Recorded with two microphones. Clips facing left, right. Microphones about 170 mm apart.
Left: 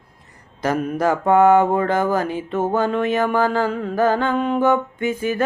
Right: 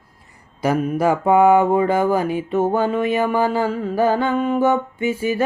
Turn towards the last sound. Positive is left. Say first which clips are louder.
# right 1 dB
turn(degrees=-10)  # may be behind; listen again after turning